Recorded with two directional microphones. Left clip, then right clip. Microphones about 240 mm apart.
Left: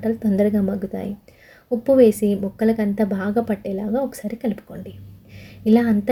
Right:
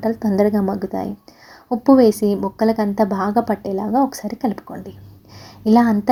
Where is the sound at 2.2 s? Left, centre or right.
Centre.